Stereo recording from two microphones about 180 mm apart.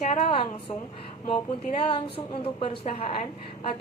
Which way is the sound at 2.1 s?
30° left (ahead or behind).